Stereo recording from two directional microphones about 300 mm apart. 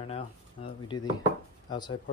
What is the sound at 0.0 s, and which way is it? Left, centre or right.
Speech, centre.